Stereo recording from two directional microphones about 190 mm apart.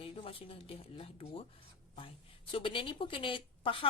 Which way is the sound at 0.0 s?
30° left (ahead or behind).